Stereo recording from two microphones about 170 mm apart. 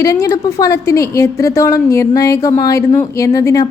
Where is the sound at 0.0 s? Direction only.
20° left (ahead or behind).